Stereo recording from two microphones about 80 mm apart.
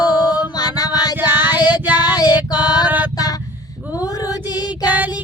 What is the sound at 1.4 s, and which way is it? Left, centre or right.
Music, left.